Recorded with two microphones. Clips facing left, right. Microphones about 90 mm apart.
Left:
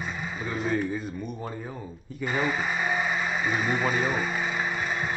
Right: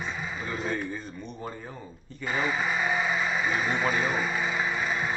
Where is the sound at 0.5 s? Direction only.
Centre (ahead or behind).